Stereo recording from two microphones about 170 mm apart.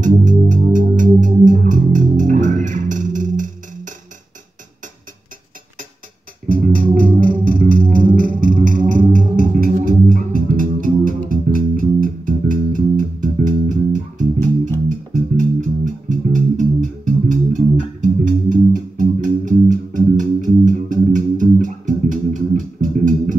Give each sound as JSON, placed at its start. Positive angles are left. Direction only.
{"t": 0.0, "sound": "music", "side_deg": -50}
{"t": 6.5, "sound": "music", "side_deg": -55}
{"t": 15.8, "sound": "music", "side_deg": -50}